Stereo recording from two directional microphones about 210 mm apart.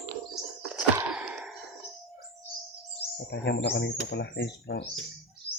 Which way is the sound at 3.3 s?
55° left (ahead or behind).